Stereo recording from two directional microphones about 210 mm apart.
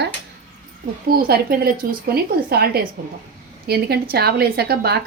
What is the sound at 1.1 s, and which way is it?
Speech, 45° right (ahead or behind).